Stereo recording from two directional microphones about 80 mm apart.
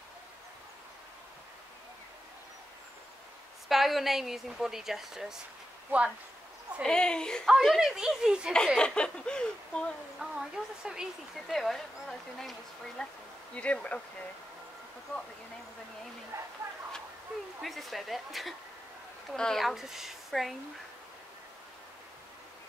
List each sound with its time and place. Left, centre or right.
3.6 s speech: centre
5.9 s speech: centre
6.8 s speech: centre
8.5 s speech: centre
10.1 s speech: centre
16.3 s speech: right
17.6 s speech: centre
19.6 s speech: centre